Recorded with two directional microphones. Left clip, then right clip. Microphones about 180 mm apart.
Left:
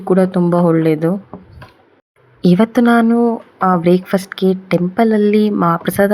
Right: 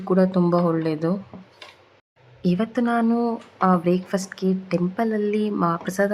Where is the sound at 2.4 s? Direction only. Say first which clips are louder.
Left 11 dB; 25° left (ahead or behind).